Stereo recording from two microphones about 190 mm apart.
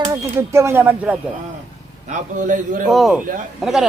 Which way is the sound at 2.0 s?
40° right (ahead or behind).